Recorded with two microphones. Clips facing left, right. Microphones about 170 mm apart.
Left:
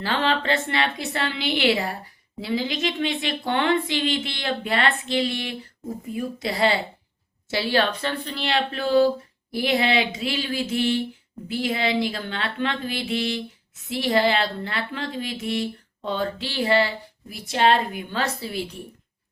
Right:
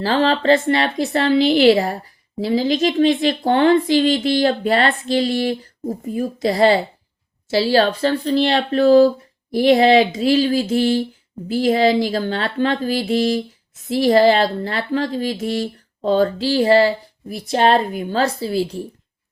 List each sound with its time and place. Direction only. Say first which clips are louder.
0.0 s speech: right 7 dB; 35° right (ahead or behind)